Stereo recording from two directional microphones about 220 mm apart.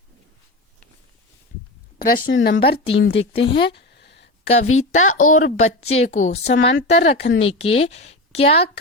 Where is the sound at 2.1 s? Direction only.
45° left (ahead or behind).